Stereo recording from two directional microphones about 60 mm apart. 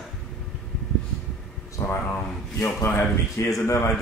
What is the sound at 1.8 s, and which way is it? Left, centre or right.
Speech, left.